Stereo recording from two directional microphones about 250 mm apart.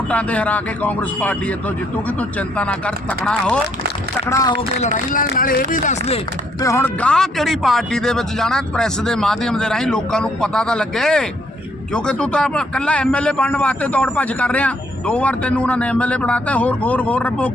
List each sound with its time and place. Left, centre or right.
0.1 s a man's voice: centre
5.1 s speech: left
6.6 s a man's voice: centre